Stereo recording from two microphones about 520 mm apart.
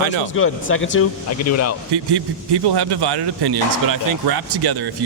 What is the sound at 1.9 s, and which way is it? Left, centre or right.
Speech, right.